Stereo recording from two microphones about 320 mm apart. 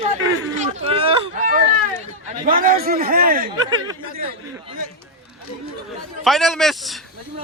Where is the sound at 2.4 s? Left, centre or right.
Right.